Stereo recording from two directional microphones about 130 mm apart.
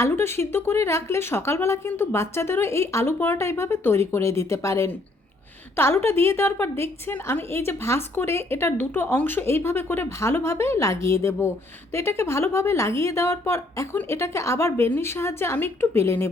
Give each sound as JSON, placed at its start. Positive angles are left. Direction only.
{"t": 0.0, "sound": "a woman's voice", "side_deg": 20}